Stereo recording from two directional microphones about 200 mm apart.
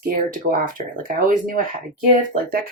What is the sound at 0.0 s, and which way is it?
Speech, 45° right (ahead or behind).